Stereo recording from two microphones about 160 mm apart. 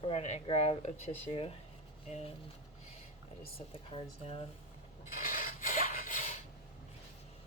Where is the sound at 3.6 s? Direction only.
35° left (ahead or behind).